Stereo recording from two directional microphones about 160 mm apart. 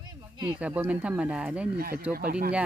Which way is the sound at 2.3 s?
75° right (ahead or behind).